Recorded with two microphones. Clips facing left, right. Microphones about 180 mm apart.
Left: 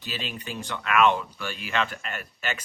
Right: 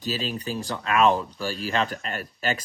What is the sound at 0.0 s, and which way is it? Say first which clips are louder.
Speech: right 6 dB; 40° right (ahead or behind).